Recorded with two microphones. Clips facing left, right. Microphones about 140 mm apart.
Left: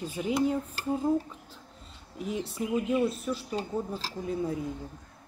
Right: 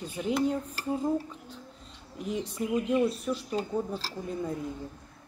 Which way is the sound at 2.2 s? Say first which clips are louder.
Even; 5° left (ahead or behind).